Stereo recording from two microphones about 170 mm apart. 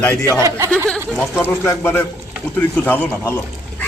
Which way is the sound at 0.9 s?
10° left (ahead or behind).